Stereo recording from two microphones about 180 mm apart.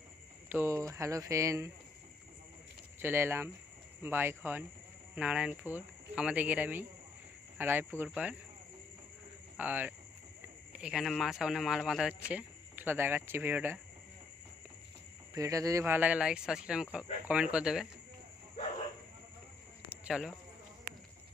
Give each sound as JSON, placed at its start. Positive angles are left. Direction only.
{"t": 0.5, "sound": "speech", "side_deg": -15}
{"t": 3.0, "sound": "speech", "side_deg": -10}
{"t": 9.6, "sound": "speech", "side_deg": -10}
{"t": 15.3, "sound": "speech", "side_deg": -20}
{"t": 19.9, "sound": "cricket", "side_deg": -5}